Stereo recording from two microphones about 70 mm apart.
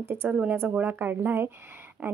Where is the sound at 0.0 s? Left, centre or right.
Right.